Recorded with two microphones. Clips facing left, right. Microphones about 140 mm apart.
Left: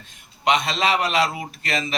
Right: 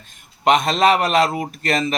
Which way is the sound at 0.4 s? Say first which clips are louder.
Right 6 dB; 45° right (ahead or behind).